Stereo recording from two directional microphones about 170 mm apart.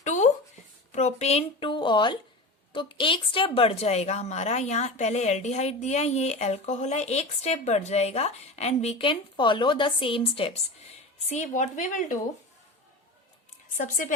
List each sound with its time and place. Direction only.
0.0 s a sound: 45° left (ahead or behind)
0.9 s a woman's voice: 40° left (ahead or behind)
13.7 s speech: 50° left (ahead or behind)